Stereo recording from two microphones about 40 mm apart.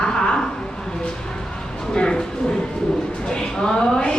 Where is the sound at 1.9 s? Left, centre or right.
Centre.